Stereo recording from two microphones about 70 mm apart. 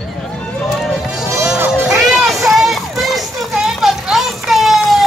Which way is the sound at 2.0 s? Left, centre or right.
Centre.